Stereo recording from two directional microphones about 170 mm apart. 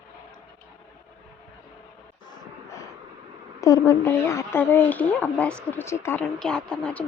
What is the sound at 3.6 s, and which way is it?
Speech, 20° left (ahead or behind).